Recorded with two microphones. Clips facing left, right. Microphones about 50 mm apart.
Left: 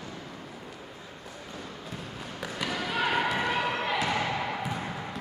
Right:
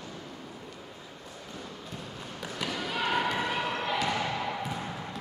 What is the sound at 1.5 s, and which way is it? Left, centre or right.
Basketball bounce, centre.